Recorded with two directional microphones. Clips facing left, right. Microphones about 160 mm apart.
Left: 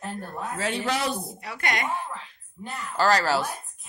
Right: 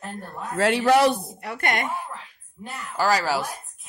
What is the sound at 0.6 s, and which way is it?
A woman's voice, 70° right (ahead or behind).